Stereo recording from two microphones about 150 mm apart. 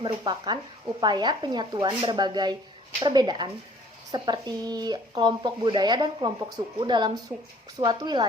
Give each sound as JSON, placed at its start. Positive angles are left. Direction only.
{"t": 0.0, "sound": "speech", "side_deg": -30}